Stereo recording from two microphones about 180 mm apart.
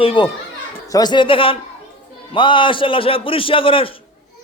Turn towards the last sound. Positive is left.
turn(degrees=30)  # may be behind; listen again after turning